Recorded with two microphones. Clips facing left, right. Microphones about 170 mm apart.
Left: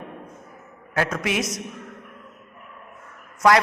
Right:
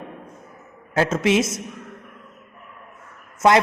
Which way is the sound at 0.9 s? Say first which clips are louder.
Right 6 dB; 25° right (ahead or behind).